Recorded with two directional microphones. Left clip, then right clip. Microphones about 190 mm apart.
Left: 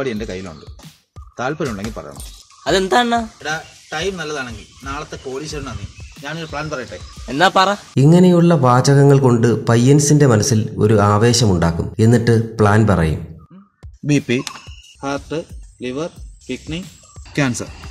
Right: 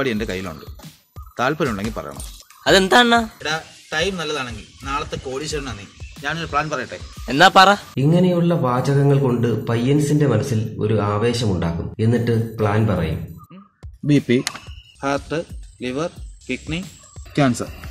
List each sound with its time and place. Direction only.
0.0 s speech: 10° right (ahead or behind)
3.4 s speech: centre (ahead or behind)
7.2 s speech: 10° right (ahead or behind)
7.9 s speech: 45° left (ahead or behind)
14.0 s speech: 10° left (ahead or behind)